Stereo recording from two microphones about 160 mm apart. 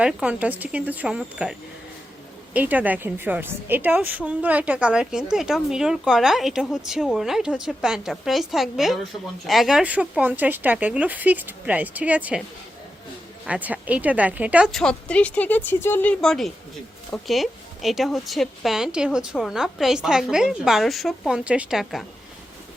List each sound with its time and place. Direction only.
0.0 s a woman's voice: 5° right (ahead or behind)
13.4 s a woman's voice: 10° right (ahead or behind)